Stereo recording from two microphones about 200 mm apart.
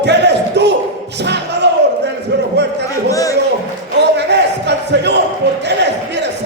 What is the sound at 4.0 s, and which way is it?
Crowd, 60° right (ahead or behind).